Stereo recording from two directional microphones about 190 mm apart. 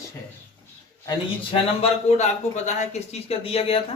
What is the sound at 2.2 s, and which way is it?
Speech, 35° left (ahead or behind).